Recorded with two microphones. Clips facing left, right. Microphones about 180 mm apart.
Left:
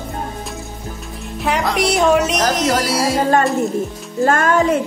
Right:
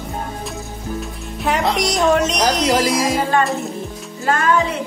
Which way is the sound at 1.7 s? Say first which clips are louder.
Left 3 dB; centre (ahead or behind).